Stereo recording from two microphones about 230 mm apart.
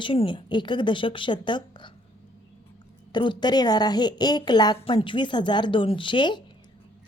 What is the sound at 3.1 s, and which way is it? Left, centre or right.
A woman's voice, centre.